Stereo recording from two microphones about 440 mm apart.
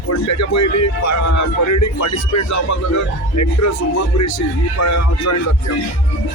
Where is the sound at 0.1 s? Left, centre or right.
Left.